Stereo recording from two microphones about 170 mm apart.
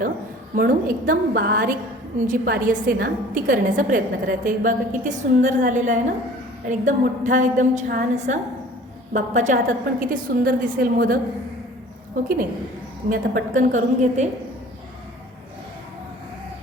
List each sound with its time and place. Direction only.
0.5 s a woman's voice: 55° right (ahead or behind)